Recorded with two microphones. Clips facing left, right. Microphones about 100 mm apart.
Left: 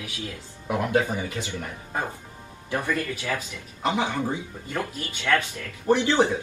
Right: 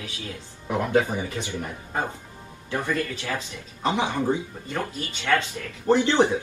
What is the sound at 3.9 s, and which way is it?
Speech, 20° right (ahead or behind).